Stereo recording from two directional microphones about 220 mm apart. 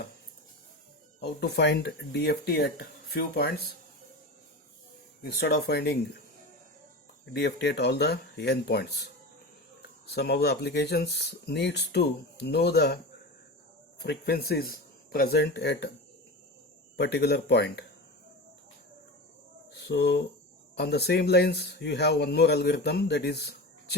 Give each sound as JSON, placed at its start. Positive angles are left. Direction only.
{"t": 1.2, "sound": "speech", "side_deg": 50}
{"t": 5.2, "sound": "speech", "side_deg": 45}
{"t": 7.3, "sound": "speech", "side_deg": 50}
{"t": 10.1, "sound": "speech", "side_deg": 50}
{"t": 14.0, "sound": "speech", "side_deg": 45}
{"t": 17.0, "sound": "speech", "side_deg": 50}
{"t": 19.7, "sound": "speech", "side_deg": 50}